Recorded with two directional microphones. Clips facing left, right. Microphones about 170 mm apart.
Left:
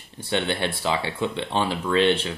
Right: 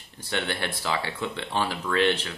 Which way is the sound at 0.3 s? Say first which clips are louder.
Left 5 dB; 20° left (ahead or behind).